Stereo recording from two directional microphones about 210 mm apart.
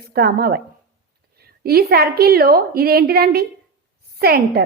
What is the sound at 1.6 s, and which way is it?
Speech, 45° right (ahead or behind).